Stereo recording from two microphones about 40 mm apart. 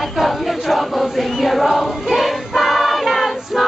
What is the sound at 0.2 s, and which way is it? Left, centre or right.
Choir, centre.